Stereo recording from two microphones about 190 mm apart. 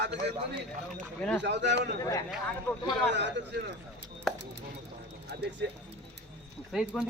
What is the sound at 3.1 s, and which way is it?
Speech, 65° right (ahead or behind).